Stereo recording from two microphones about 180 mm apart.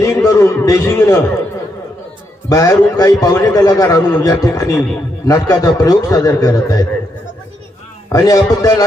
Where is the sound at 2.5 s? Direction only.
20° left (ahead or behind).